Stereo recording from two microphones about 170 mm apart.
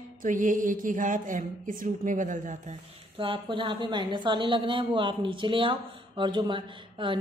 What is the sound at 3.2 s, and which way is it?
A woman's voice, 30° right (ahead or behind).